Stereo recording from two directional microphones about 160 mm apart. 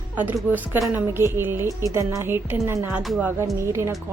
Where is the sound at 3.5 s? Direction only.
15° right (ahead or behind).